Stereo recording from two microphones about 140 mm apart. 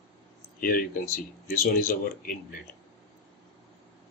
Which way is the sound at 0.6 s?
90° left.